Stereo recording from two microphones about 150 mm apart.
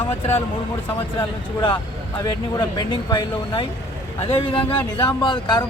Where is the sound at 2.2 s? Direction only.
25° left (ahead or behind).